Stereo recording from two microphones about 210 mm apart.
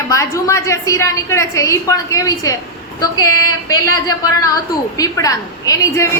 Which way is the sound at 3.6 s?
20° left (ahead or behind).